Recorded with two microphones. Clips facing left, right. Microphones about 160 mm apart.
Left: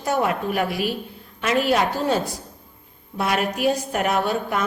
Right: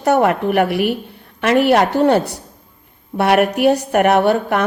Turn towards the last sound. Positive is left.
turn(degrees=-65)  # may be behind; listen again after turning